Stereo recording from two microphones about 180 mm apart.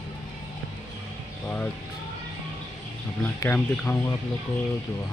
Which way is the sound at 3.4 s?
10° left (ahead or behind).